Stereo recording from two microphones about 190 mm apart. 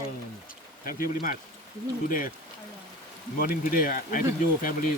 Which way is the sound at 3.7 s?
45° left (ahead or behind).